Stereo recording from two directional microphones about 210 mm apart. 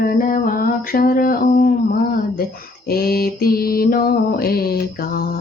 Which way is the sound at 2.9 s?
45° left (ahead or behind).